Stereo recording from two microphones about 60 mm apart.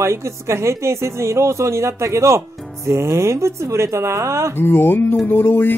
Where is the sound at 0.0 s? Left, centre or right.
Right.